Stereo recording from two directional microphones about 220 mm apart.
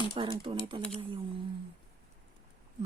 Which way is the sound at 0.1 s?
20° right (ahead or behind).